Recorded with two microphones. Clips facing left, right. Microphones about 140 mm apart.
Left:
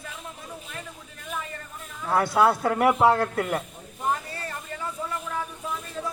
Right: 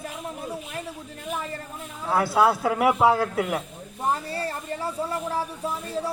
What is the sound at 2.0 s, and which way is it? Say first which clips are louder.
A man's voice: even; centre (ahead or behind).